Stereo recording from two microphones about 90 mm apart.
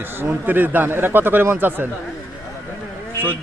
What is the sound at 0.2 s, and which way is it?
Speech, 20° right (ahead or behind).